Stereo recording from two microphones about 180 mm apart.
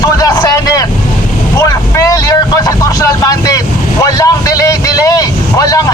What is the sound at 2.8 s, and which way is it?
Speech, 20° left (ahead or behind).